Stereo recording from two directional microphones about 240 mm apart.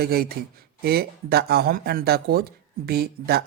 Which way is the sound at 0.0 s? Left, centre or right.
Right.